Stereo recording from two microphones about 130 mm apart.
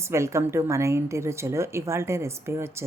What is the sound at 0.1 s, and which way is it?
A woman's voice, 20° right (ahead or behind).